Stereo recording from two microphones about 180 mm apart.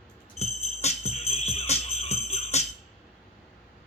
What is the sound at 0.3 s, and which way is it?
Jingle bell, 35° left (ahead or behind).